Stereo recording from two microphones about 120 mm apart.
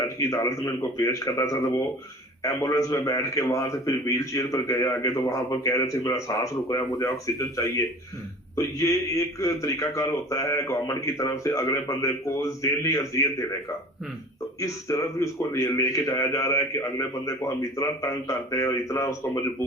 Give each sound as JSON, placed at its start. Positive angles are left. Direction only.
{"t": 0.2, "sound": "a man's voice", "side_deg": 25}
{"t": 14.6, "sound": "a man's voice", "side_deg": 25}